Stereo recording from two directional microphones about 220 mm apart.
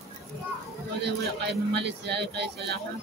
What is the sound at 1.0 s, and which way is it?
Speech, 50° right (ahead or behind).